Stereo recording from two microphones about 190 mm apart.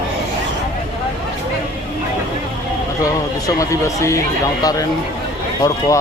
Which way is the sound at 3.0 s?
15° left (ahead or behind).